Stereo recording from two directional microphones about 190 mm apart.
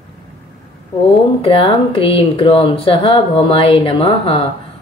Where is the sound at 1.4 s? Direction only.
30° left (ahead or behind).